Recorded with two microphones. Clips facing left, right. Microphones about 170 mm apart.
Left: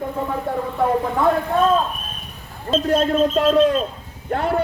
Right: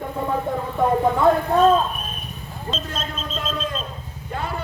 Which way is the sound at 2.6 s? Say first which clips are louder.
Left 12 dB; 60° left (ahead or behind).